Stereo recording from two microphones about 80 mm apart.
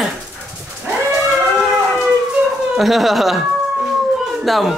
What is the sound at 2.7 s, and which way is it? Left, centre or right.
Speech, centre.